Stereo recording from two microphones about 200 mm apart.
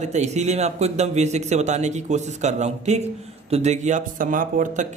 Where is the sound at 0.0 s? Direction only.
35° right (ahead or behind).